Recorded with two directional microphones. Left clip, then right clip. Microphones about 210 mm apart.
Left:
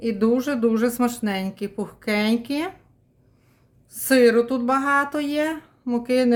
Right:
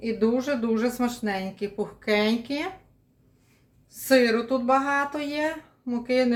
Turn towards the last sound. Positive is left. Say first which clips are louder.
# left 3 dB
turn(degrees=40)  # may be behind; listen again after turning